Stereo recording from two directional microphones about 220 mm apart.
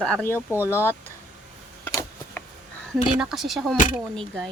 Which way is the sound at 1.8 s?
10° left (ahead or behind).